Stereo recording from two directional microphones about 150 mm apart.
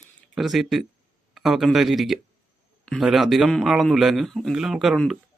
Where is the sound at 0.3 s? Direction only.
Centre (ahead or behind).